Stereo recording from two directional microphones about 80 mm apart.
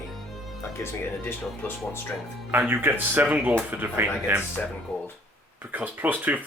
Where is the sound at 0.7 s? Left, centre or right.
Left.